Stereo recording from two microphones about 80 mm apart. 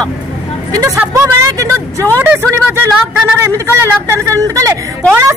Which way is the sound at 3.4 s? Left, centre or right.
Right.